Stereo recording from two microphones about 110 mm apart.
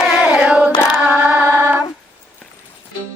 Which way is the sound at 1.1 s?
20° right (ahead or behind).